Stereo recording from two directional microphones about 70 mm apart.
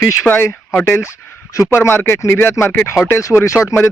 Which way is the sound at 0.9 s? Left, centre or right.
Left.